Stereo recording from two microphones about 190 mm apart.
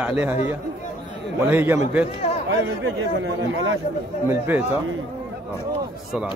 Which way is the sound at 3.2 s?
75° right (ahead or behind).